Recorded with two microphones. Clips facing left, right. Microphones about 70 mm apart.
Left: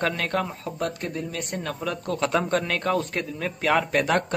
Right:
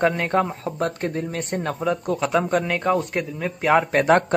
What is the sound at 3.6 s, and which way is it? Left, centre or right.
Speech, right.